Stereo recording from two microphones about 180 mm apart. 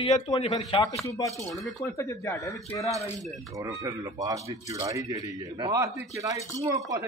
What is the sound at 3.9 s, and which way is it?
Speech, 20° right (ahead or behind).